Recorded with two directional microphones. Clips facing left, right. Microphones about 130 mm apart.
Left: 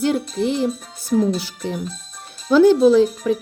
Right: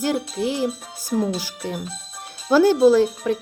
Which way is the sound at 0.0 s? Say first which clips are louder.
Left 3 dB; 10° right (ahead or behind).